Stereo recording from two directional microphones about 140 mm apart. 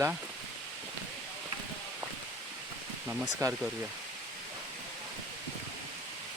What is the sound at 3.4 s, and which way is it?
Speech, 20° right (ahead or behind).